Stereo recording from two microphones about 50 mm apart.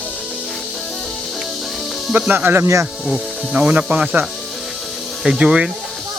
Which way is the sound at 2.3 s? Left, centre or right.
Right.